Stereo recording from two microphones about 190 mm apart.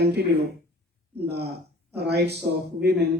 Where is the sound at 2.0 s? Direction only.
60° right (ahead or behind).